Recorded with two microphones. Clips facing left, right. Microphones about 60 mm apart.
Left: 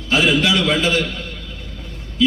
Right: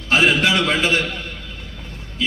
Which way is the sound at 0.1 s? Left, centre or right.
Right.